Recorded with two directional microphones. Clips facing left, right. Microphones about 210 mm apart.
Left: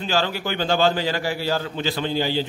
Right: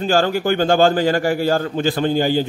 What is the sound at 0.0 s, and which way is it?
A man's voice, 50° right (ahead or behind).